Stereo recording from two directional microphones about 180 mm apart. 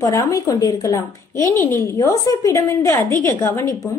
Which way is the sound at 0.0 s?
20° left (ahead or behind).